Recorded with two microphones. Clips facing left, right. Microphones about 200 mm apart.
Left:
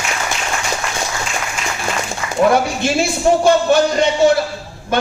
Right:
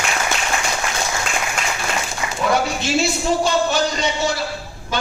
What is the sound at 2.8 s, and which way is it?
A man's voice, 55° left (ahead or behind).